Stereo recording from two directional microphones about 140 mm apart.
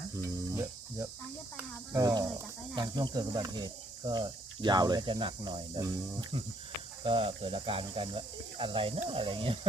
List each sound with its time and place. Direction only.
0.4 s cricket: 25° right (ahead or behind)
1.9 s speech: 25° right (ahead or behind)